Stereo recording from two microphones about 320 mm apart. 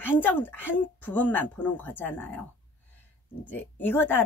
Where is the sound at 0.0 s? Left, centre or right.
Centre.